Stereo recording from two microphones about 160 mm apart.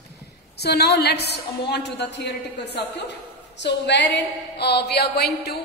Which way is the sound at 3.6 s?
90° left.